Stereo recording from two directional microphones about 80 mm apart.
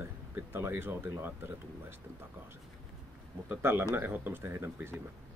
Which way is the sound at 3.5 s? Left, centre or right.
Right.